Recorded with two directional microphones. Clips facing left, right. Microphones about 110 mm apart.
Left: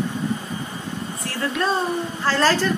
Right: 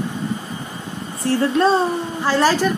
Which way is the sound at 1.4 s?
30° right (ahead or behind).